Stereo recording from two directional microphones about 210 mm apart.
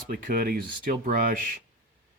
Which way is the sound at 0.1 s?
45° right (ahead or behind).